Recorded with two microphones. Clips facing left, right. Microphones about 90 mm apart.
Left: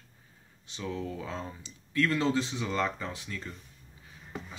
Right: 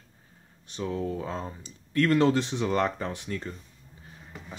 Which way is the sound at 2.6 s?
50° right (ahead or behind).